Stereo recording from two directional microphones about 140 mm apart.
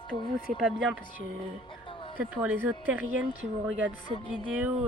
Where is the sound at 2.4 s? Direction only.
10° right (ahead or behind).